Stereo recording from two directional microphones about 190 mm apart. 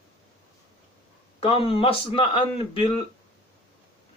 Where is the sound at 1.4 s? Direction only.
30° left (ahead or behind).